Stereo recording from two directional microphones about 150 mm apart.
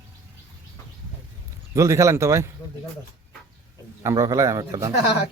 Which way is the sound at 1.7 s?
20° right (ahead or behind).